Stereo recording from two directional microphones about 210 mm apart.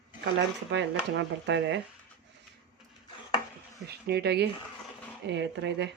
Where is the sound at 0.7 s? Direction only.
55° right (ahead or behind).